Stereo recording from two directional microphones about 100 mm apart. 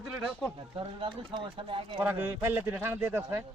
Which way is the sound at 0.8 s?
55° right (ahead or behind).